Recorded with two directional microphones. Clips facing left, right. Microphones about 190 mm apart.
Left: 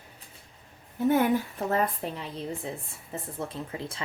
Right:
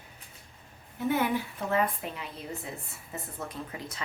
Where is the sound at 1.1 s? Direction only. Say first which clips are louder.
Left 4 dB; 45° left (ahead or behind).